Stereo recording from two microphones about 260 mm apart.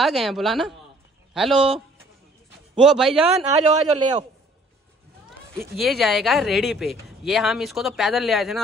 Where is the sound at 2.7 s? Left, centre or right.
Centre.